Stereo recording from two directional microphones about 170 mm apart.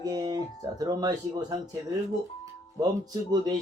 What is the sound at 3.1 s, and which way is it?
Speech, 20° right (ahead or behind).